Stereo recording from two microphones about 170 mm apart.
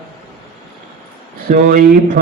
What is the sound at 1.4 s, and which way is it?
Mantra, 55° right (ahead or behind).